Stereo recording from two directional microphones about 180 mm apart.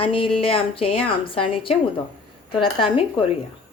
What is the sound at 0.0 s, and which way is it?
Speech, 30° left (ahead or behind).